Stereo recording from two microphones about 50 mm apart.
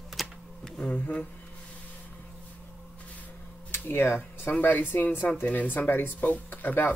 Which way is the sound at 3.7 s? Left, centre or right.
Left.